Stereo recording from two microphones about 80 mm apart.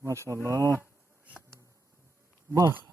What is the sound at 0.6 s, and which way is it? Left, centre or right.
Speech, left.